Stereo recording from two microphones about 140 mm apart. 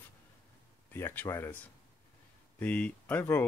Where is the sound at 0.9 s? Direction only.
15° left (ahead or behind).